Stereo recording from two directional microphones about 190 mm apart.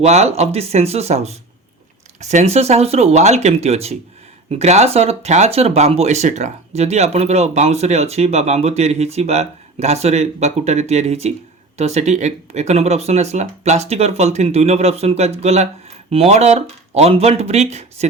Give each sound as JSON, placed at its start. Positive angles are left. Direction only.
{"t": 0.0, "sound": "speech", "side_deg": -35}